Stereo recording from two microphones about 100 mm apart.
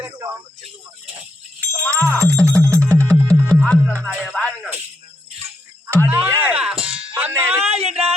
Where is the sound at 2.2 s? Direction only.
30° right (ahead or behind).